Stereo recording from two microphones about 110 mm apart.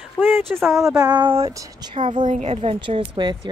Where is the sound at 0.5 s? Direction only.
Centre (ahead or behind).